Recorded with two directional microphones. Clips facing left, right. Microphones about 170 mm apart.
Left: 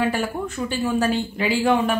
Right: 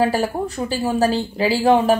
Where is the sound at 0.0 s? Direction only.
40° right (ahead or behind).